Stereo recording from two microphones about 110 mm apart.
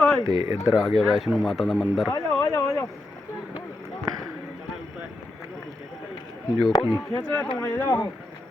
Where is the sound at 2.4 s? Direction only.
30° left (ahead or behind).